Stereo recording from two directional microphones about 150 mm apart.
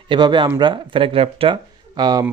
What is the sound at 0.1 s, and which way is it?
Speech, 30° right (ahead or behind).